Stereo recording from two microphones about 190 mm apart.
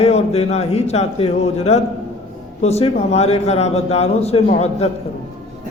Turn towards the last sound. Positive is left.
turn(degrees=30)  # may be behind; listen again after turning